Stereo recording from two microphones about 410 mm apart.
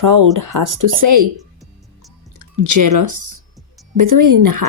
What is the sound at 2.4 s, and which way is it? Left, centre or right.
Speech, right.